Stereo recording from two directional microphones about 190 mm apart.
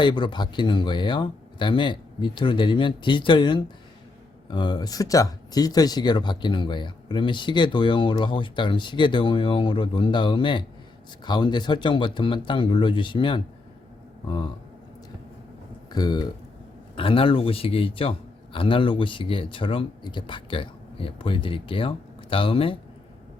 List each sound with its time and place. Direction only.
0.0 s speech: 25° left (ahead or behind)
15.9 s speech: 20° left (ahead or behind)